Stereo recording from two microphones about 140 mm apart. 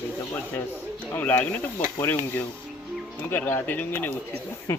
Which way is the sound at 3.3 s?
15° left (ahead or behind).